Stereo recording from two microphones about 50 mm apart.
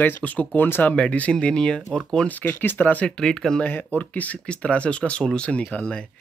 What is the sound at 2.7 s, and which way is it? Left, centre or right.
Speech, left.